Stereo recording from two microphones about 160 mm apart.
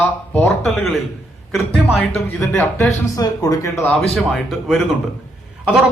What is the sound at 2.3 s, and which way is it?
Speech, 15° left (ahead or behind).